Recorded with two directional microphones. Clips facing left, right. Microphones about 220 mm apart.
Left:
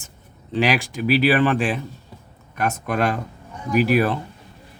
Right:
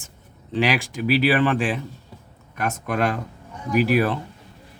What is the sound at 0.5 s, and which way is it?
Speech, 40° left (ahead or behind).